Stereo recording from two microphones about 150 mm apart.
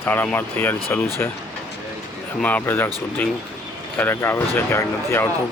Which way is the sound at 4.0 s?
15° left (ahead or behind).